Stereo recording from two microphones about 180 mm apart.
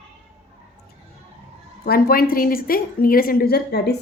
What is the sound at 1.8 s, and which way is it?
A woman's voice, 55° left (ahead or behind).